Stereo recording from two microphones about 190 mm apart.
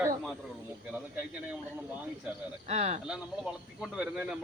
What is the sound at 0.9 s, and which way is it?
Speech, 10° right (ahead or behind).